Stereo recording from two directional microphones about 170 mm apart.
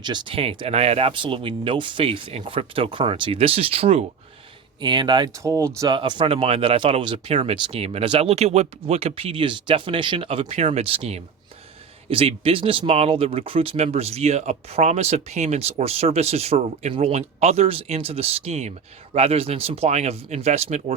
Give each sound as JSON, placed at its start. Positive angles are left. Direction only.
{"t": 0.0, "sound": "speech", "side_deg": -25}
{"t": 6.0, "sound": "speech", "side_deg": -30}